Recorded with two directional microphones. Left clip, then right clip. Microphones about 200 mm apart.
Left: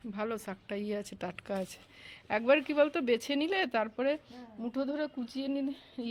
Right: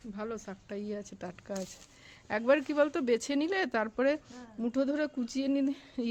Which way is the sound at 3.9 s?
30° right (ahead or behind).